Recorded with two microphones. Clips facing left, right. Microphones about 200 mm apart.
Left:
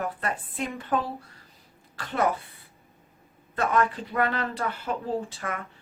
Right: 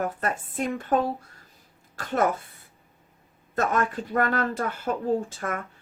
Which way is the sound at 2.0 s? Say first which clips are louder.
Right 3 dB; 45° right (ahead or behind).